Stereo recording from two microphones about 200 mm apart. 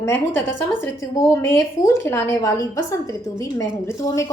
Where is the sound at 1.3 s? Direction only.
15° left (ahead or behind).